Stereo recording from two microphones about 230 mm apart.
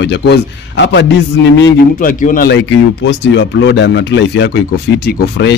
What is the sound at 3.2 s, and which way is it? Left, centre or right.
Speech, left.